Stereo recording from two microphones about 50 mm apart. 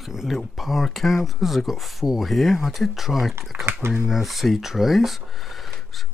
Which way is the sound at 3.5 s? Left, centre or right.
Right.